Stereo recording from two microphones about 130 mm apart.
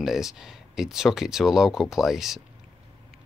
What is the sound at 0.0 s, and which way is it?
Speech, 5° right (ahead or behind).